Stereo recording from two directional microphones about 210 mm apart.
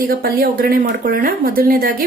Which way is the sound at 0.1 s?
45° right (ahead or behind).